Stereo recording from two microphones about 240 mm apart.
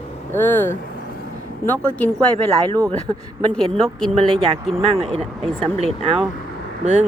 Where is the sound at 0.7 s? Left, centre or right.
Left.